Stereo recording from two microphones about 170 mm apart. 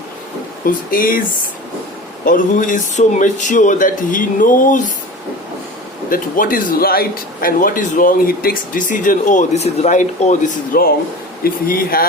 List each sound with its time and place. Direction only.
0.6 s speech: 55° left (ahead or behind)
2.2 s a man's voice: 50° left (ahead or behind)
6.1 s a man's voice: 55° left (ahead or behind)
11.4 s speech: 60° left (ahead or behind)